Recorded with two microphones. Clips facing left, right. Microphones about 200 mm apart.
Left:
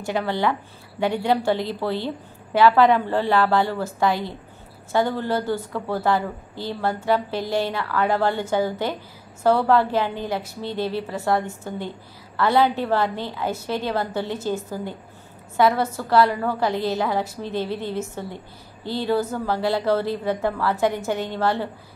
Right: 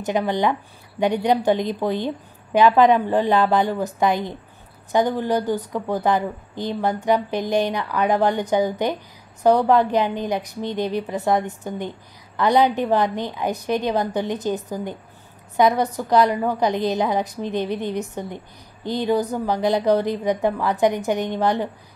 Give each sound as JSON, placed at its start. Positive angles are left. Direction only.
{"t": 0.0, "sound": "a woman's voice", "side_deg": -20}